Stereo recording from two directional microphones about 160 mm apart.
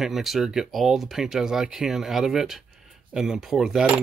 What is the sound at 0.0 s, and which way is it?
Speech, centre (ahead or behind).